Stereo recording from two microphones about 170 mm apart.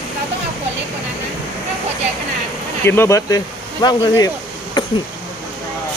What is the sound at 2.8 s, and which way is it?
Speech, 15° left (ahead or behind).